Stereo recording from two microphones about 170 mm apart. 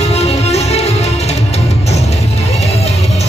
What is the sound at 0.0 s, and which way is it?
Music, 40° left (ahead or behind).